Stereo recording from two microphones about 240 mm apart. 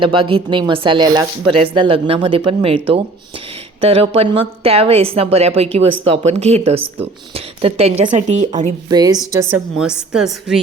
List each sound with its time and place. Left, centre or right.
0.0 s speech: right
8.9 s a woman's voice: centre